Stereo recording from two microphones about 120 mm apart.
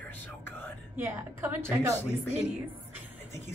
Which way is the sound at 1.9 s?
20° left (ahead or behind).